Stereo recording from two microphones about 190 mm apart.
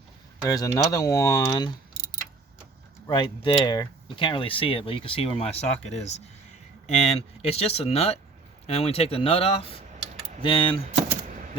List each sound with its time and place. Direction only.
0.4 s speech: 15° left (ahead or behind)
3.1 s speech: 25° left (ahead or behind)